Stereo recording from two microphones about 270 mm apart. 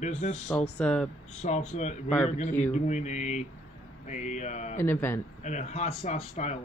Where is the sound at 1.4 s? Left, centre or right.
Left.